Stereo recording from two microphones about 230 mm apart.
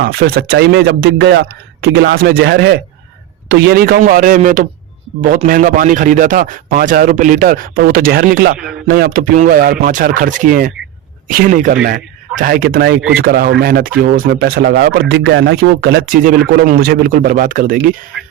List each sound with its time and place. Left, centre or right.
0.0 s speech: right
18.1 s speech: centre